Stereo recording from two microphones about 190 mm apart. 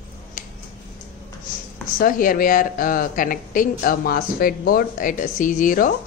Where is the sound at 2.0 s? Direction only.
45° left (ahead or behind).